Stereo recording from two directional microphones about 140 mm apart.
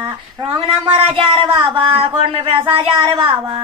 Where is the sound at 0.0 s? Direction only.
40° right (ahead or behind).